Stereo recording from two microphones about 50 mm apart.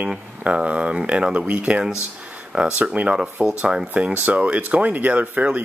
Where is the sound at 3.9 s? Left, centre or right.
Right.